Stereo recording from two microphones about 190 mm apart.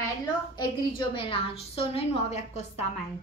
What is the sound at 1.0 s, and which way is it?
A woman's voice, 25° left (ahead or behind).